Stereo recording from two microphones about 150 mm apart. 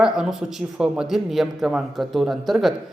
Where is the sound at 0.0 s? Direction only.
5° right (ahead or behind).